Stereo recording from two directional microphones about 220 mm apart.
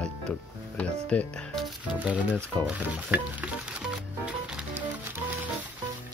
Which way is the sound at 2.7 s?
5° right (ahead or behind).